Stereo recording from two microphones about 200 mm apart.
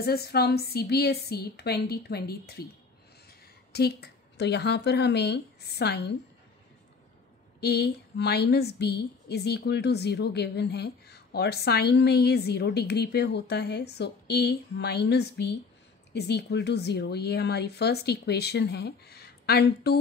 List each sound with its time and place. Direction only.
0.0 s a woman's voice: 50° left (ahead or behind)
7.6 s a woman's voice: 55° left (ahead or behind)